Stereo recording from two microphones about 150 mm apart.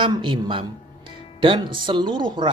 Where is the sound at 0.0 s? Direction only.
30° right (ahead or behind).